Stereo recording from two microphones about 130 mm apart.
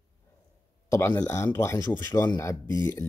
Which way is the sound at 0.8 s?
20° left (ahead or behind).